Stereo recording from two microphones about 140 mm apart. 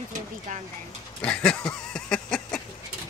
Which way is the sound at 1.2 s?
10° left (ahead or behind).